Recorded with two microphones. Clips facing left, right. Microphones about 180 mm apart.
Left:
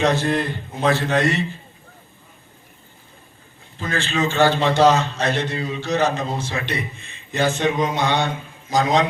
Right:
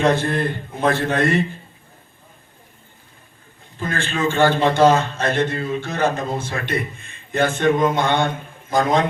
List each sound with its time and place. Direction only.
0.0 s a man's voice: 55° right (ahead or behind)
3.8 s a man's voice: 55° right (ahead or behind)